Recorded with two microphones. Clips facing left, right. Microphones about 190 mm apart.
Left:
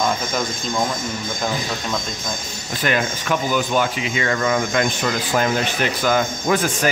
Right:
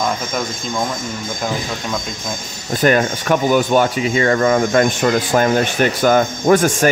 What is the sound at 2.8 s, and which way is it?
Speech, 45° right (ahead or behind).